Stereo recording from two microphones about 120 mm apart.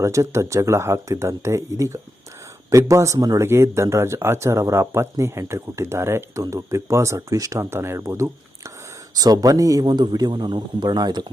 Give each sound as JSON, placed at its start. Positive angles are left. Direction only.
{"t": 0.0, "sound": "a man's voice", "side_deg": -25}